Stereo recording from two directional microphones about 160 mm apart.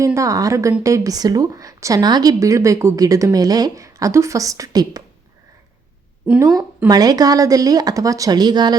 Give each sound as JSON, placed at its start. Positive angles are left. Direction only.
{"t": 0.0, "sound": "a woman's voice", "side_deg": -20}
{"t": 6.4, "sound": "a woman's voice", "side_deg": -25}